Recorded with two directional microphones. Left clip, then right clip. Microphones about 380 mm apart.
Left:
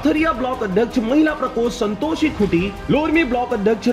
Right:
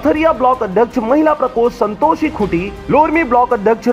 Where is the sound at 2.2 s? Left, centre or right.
Centre.